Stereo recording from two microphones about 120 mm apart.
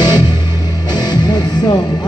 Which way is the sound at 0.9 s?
35° left (ahead or behind).